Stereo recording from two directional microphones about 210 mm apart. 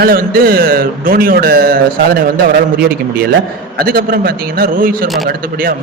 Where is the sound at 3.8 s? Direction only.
45° right (ahead or behind).